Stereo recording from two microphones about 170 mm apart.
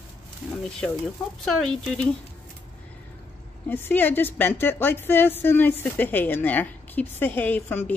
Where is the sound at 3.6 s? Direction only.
10° left (ahead or behind).